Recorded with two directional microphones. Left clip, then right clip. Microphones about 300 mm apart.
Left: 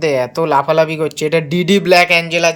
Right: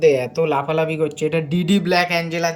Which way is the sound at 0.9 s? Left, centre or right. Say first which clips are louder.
Left 4 dB; centre.